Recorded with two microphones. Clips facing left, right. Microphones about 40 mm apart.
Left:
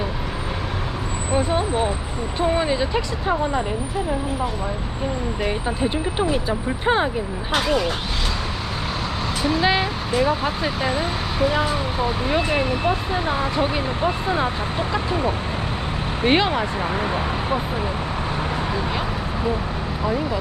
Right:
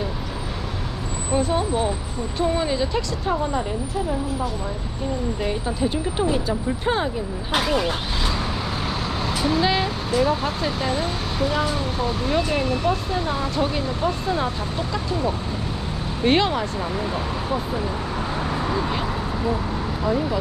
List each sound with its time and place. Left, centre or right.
1.3 s speech: centre
5.4 s speech: left
7.5 s speech: centre
9.4 s speech: centre
9.6 s speech: centre; by 15.4 s left
16.2 s speech: centre
16.8 s speech: left
20.1 s speech: centre